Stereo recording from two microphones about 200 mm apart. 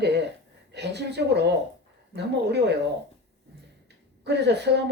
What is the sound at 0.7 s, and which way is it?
Speech, 55° right (ahead or behind).